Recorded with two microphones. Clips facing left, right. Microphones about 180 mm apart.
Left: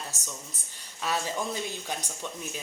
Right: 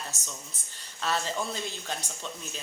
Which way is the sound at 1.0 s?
10° left (ahead or behind).